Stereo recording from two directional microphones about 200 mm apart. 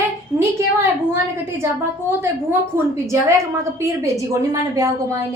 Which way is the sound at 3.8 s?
15° right (ahead or behind).